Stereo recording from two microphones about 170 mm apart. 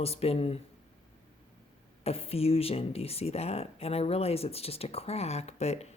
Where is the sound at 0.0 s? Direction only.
35° left (ahead or behind).